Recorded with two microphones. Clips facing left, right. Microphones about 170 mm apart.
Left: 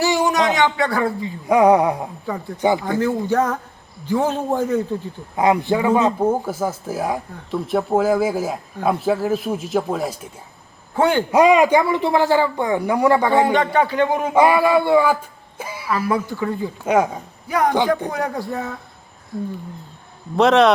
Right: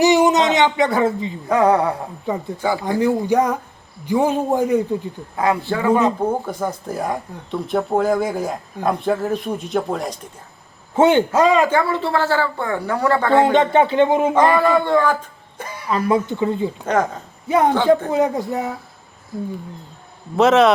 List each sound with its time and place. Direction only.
0.0 s speech: 20° right (ahead or behind)
1.5 s speech: 10° left (ahead or behind)
3.0 s a man's voice: 15° right (ahead or behind)
5.4 s speech: 20° left (ahead or behind)
10.9 s a man's voice: 20° right (ahead or behind)
11.3 s speech: 15° left (ahead or behind)
13.5 s speech: 25° right (ahead or behind)
14.3 s speech: 10° left (ahead or behind)
16.0 s speech: 20° right (ahead or behind)
16.8 s speech: 10° left (ahead or behind)
17.5 s speech: 25° right (ahead or behind)
20.3 s speech: centre (ahead or behind)